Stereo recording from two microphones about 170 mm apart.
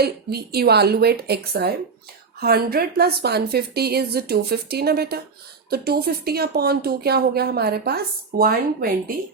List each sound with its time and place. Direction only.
0.0 s speech: 70° right (ahead or behind)